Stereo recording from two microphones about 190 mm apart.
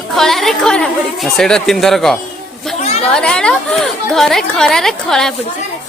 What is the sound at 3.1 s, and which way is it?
A woman's voice, 5° left (ahead or behind).